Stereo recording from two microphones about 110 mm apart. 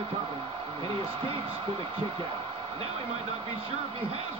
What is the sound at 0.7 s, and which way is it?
A man's voice, 55° right (ahead or behind).